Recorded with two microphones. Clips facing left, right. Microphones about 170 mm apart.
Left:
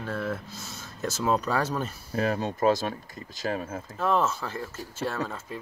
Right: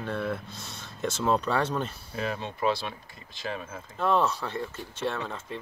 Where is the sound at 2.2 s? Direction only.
45° left (ahead or behind).